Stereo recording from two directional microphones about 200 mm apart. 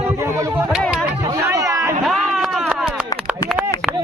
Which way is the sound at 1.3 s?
15° right (ahead or behind).